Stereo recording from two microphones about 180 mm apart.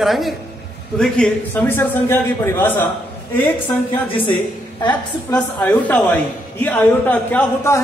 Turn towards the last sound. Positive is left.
turn(degrees=10)  # may be behind; listen again after turning